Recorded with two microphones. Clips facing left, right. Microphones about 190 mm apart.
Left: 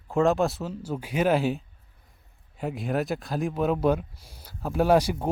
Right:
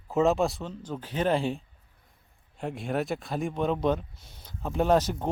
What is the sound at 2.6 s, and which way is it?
Speech, centre (ahead or behind).